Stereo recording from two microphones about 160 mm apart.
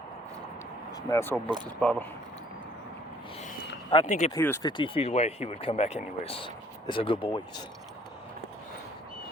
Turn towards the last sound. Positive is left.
turn(degrees=30)  # may be behind; listen again after turning